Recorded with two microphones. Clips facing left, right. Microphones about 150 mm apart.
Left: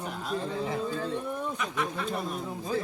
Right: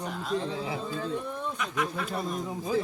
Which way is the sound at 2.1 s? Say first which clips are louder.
Right 1 dB; 5° left (ahead or behind).